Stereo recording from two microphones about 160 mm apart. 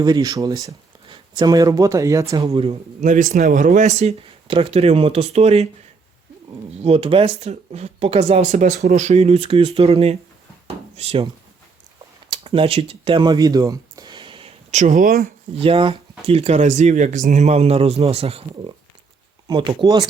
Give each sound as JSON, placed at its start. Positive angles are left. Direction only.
{"t": 0.0, "sound": "speech", "side_deg": -25}
{"t": 2.4, "sound": "speech", "side_deg": -35}
{"t": 3.0, "sound": "speech", "side_deg": -50}
{"t": 6.8, "sound": "speech", "side_deg": -35}
{"t": 12.3, "sound": "speech", "side_deg": -35}
{"t": 14.7, "sound": "speech", "side_deg": -50}
{"t": 15.5, "sound": "speech", "side_deg": -35}